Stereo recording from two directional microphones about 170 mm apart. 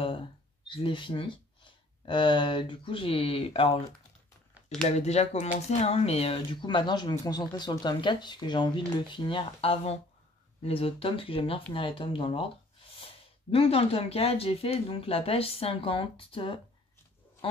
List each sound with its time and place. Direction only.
0.7 s speech: 30° left (ahead or behind)
4.8 s speech: 40° left (ahead or behind)